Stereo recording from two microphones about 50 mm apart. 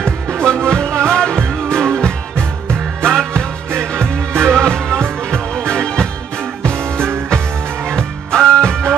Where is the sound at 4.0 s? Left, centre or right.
Right.